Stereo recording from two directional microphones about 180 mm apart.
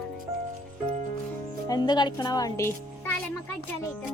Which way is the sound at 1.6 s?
25° left (ahead or behind).